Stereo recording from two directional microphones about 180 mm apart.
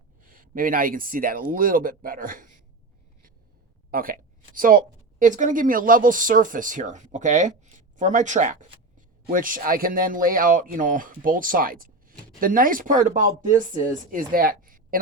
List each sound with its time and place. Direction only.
0.2 s speech: 50° right (ahead or behind)
3.9 s speech: 50° right (ahead or behind)